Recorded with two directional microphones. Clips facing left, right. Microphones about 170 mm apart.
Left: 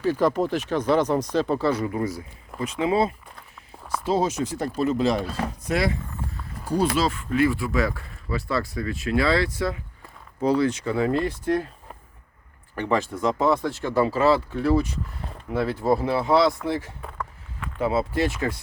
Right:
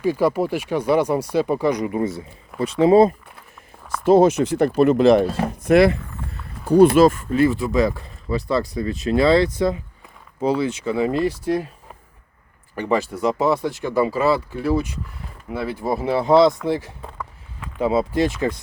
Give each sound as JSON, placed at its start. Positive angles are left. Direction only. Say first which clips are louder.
{"t": 0.0, "sound": "speech", "louder": "right 2 dB", "side_deg": -10}
{"t": 2.6, "sound": "speech", "louder": "right 9 dB", "side_deg": -35}
{"t": 4.0, "sound": "speech", "louder": "right 10 dB", "side_deg": -55}
{"t": 6.9, "sound": "speech", "louder": "right 10 dB", "side_deg": -50}
{"t": 7.3, "sound": "speech", "louder": "right 4 dB", "side_deg": -25}
{"t": 12.7, "sound": "speech", "louder": "right 3 dB", "side_deg": -10}
{"t": 16.3, "sound": "speech", "louder": "right 6 dB", "side_deg": -20}
{"t": 16.6, "sound": "a sound", "louder": "right 4 dB", "side_deg": -15}